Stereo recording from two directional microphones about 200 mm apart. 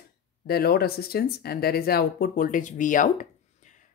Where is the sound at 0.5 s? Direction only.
50° left (ahead or behind).